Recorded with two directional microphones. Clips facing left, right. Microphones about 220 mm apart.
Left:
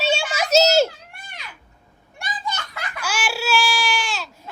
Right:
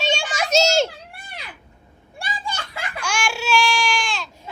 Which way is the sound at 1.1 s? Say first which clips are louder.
Right 3 dB; 35° right (ahead or behind).